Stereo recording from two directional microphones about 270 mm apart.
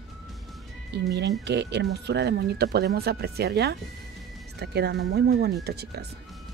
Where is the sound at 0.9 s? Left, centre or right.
Right.